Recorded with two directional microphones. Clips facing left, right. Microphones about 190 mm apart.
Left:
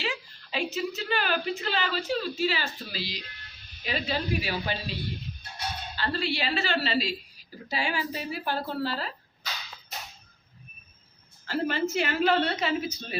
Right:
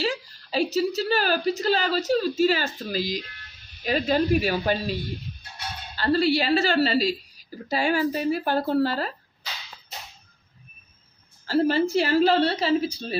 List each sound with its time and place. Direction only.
0.0 s a woman's voice: 40° right (ahead or behind)
6.0 s a woman's voice: 40° right (ahead or behind)
11.4 s a woman's voice: 35° right (ahead or behind)